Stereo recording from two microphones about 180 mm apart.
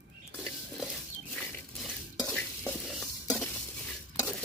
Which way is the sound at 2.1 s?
10° left (ahead or behind).